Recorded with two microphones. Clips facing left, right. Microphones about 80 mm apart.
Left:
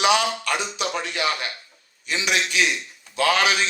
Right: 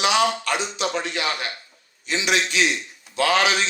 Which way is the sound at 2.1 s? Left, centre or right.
Right.